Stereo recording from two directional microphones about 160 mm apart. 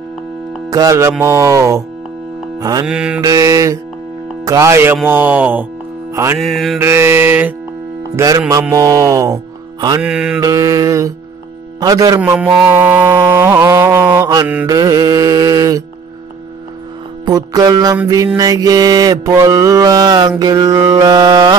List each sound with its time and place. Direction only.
0.7 s music: 20° right (ahead or behind)
1.2 s mantra: 20° right (ahead or behind)
2.9 s mantra: 5° right (ahead or behind)
3.2 s mantra: 20° right (ahead or behind)
4.5 s a sound: 20° right (ahead or behind)
6.4 s mantra: centre (ahead or behind)
6.8 s a sound: 15° right (ahead or behind)
8.2 s mantra: 20° right (ahead or behind)
10.0 s mantra: 5° right (ahead or behind)
10.4 s mantra: 20° right (ahead or behind)
12.2 s a sound: 10° right (ahead or behind)
14.7 s mantra: 25° right (ahead or behind)
17.2 s music: 25° right (ahead or behind)
18.0 s mantra: 20° right (ahead or behind)